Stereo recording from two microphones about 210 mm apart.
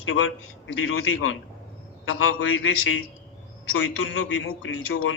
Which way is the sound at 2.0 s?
65° left (ahead or behind).